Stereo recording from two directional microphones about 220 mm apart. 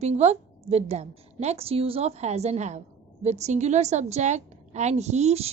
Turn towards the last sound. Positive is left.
turn(degrees=-30)  # may be behind; listen again after turning